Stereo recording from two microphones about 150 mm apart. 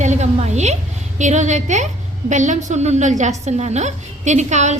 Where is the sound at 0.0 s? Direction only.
50° right (ahead or behind).